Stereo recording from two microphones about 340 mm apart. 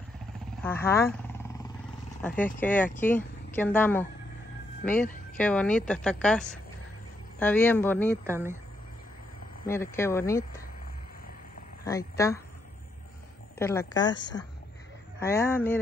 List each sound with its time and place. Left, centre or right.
0.6 s a woman's voice: centre
8.3 s speech: centre
9.7 s speech: centre
11.8 s speech: centre
13.6 s speech: centre
15.1 s speech: centre